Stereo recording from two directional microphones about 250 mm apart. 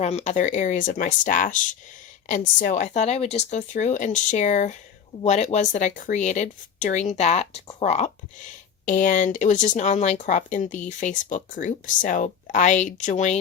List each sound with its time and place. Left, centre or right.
0.0 s speech: left